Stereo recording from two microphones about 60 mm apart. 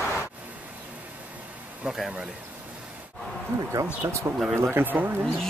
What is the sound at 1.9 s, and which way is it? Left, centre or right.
Speech, centre.